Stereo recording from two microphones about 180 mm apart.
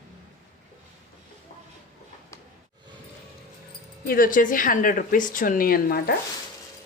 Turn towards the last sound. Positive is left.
turn(degrees=55)  # may be behind; listen again after turning